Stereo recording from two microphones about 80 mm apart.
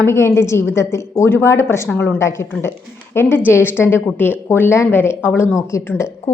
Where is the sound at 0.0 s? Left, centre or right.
Left.